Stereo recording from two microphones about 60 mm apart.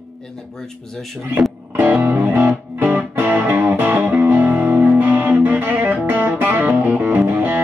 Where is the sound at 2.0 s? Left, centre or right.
Right.